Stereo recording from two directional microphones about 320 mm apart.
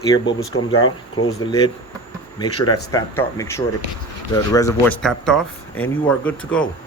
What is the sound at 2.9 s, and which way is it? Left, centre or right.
Speech, centre.